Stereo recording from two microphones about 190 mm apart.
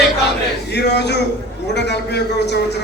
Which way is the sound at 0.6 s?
60° left (ahead or behind).